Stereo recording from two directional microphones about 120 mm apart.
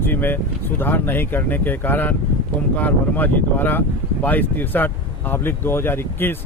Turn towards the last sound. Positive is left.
turn(degrees=20)  # may be behind; listen again after turning